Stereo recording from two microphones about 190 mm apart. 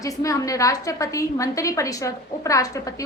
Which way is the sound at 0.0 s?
15° left (ahead or behind).